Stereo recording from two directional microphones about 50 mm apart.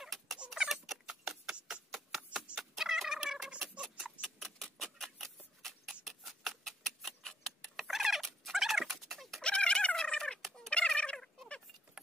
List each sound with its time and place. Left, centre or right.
0.6 s rodents: centre
1.9 s a sound: centre
2.3 s cat: centre
2.8 s fowl: centre
3.3 s turkey: centre
3.8 s a sound: centre
7.8 s cat: centre
9.4 s cat: centre
10.7 s fowl: left